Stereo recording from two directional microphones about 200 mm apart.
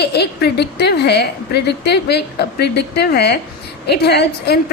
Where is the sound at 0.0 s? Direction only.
55° left (ahead or behind).